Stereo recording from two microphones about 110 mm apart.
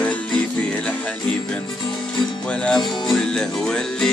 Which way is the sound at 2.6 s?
5° left (ahead or behind).